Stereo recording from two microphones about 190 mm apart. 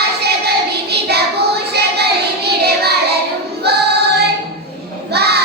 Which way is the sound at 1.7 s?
60° right (ahead or behind).